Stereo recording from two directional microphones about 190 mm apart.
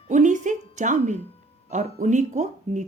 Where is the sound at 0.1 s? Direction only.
40° right (ahead or behind).